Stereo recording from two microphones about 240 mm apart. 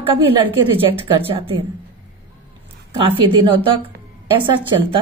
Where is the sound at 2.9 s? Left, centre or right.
Right.